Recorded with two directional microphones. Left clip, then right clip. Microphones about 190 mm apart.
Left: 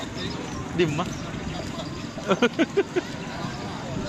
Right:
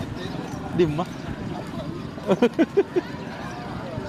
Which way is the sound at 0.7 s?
30° right (ahead or behind).